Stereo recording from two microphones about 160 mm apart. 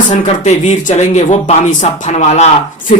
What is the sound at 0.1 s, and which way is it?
Speech, 45° left (ahead or behind).